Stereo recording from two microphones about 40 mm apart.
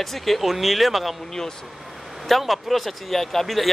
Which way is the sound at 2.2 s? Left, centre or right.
Centre.